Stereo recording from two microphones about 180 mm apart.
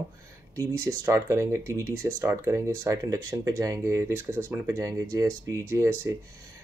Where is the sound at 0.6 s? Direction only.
15° right (ahead or behind).